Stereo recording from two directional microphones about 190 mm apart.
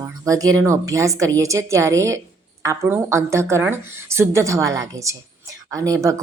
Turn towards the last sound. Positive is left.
turn(degrees=-15)  # may be behind; listen again after turning